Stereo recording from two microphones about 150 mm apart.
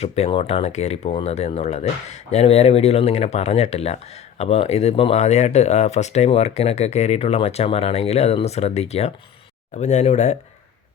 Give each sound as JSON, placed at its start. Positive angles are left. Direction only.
{"t": 0.0, "sound": "speech", "side_deg": 40}